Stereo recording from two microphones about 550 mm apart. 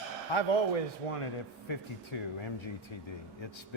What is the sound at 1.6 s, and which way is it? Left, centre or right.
A man's voice, left.